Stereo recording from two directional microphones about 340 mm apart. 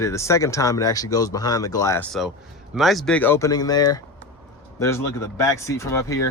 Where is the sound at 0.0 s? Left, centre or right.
Centre.